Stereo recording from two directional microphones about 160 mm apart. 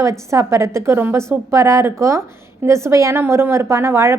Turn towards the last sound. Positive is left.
turn(degrees=-15)  # may be behind; listen again after turning